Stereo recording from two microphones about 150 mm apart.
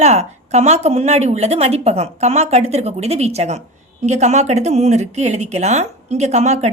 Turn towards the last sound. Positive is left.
turn(degrees=-50)  # may be behind; listen again after turning